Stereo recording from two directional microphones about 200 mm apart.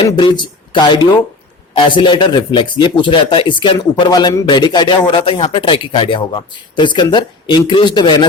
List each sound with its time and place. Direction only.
0.0 s a man's voice: 25° left (ahead or behind)